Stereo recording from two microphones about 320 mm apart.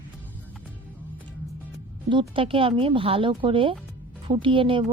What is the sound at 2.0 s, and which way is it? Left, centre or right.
Speech, centre.